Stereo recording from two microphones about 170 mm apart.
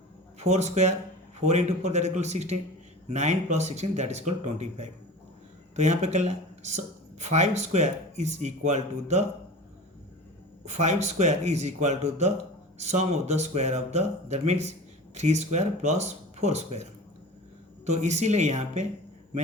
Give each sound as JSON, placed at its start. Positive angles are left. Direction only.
{"t": 0.3, "sound": "speech", "side_deg": -40}
{"t": 10.7, "sound": "speech", "side_deg": -40}
{"t": 17.8, "sound": "speech", "side_deg": -45}